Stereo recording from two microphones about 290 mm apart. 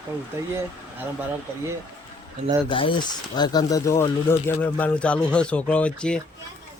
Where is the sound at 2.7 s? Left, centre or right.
Centre.